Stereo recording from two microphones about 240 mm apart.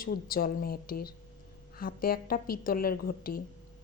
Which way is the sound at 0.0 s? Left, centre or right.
Left.